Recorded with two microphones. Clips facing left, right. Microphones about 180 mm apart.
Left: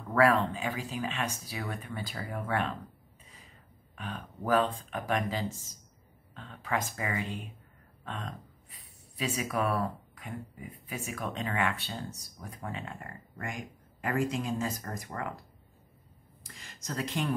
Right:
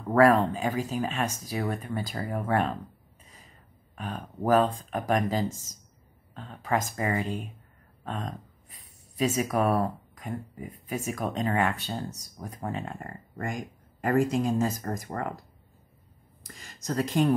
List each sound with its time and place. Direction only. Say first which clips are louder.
0.1 s speech: right 5 dB; 45° right (ahead or behind)
3.9 s speech: right 4 dB; 40° right (ahead or behind)
8.0 s a sound: right 5 dB; 40° right (ahead or behind)
10.1 s speech: right 5 dB; 40° right (ahead or behind)
16.4 s speech: right 7 dB; 45° right (ahead or behind)